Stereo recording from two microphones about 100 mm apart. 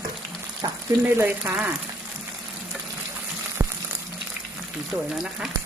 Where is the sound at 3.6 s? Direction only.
35° right (ahead or behind).